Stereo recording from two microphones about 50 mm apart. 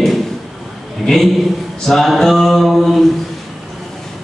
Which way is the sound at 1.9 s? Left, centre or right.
Centre.